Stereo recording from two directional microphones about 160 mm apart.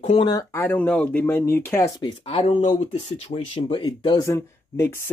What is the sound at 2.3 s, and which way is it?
Speech, 35° left (ahead or behind).